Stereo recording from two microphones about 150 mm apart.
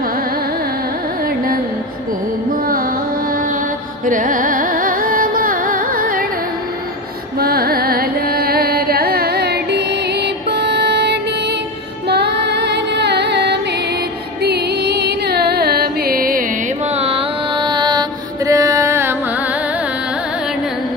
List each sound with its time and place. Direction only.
4.0 s carnatic music: 65° right (ahead or behind)
7.3 s carnatic music: 90° right
12.1 s music: 90° right; by 16.4 s 70° right (ahead or behind)
16.9 s mantra: 40° right (ahead or behind); by 19.1 s 15° right (ahead or behind)